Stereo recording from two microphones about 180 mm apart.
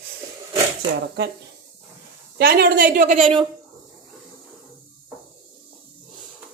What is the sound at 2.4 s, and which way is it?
Speech, 55° right (ahead or behind).